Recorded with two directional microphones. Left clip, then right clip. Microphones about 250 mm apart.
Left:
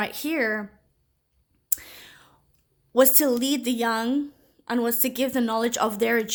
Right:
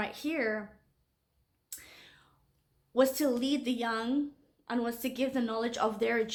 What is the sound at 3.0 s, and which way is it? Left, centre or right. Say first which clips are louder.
A woman's voice: left 7 dB; left.